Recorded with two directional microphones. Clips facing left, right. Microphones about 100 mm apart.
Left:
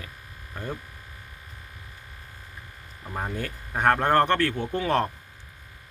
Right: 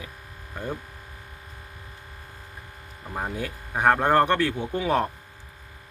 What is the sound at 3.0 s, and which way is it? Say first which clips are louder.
A man's voice: right 1 dB; 10° right (ahead or behind).